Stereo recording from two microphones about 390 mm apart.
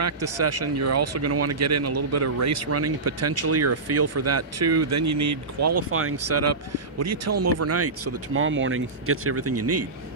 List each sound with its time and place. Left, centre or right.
0.0 s speech: right